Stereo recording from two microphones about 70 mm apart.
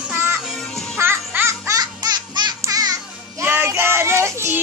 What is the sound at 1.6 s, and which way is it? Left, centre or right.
Music, right.